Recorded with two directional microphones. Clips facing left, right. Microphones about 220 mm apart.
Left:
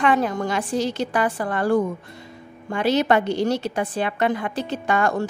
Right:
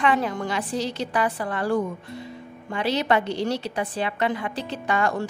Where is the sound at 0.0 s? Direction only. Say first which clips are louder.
Left 3 dB; 45° left (ahead or behind).